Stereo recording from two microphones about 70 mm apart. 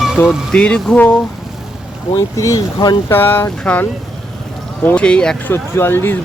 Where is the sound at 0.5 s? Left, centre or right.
Centre.